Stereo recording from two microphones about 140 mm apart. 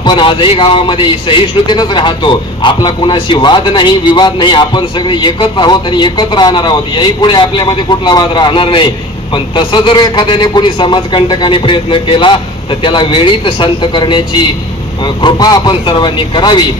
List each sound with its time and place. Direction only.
0.0 s a man's voice: 35° left (ahead or behind)